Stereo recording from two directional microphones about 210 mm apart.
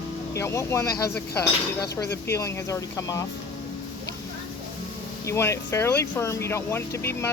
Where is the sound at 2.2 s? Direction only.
15° left (ahead or behind).